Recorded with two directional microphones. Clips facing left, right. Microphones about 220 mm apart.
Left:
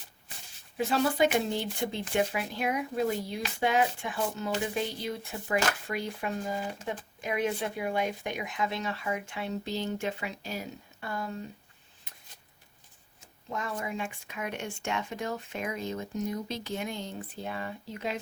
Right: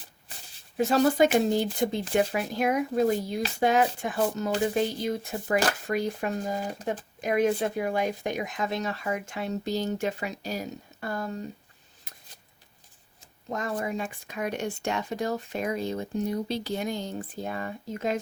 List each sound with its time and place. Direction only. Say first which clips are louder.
0.8 s speech: right 5 dB; 40° right (ahead or behind)
13.5 s speech: right 5 dB; 40° right (ahead or behind)